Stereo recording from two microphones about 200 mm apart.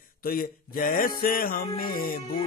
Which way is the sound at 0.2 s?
45° left (ahead or behind).